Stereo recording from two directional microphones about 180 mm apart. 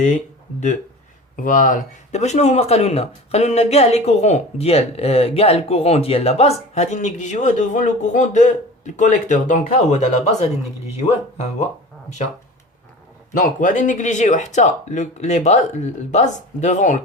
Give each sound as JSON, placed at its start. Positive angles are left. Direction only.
{"t": 1.4, "sound": "speech", "side_deg": 45}
{"t": 13.3, "sound": "speech", "side_deg": 45}